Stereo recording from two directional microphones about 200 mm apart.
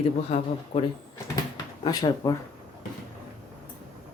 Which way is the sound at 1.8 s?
20° left (ahead or behind).